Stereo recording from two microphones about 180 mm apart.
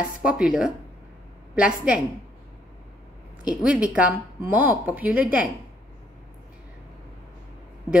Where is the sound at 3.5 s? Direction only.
5° right (ahead or behind).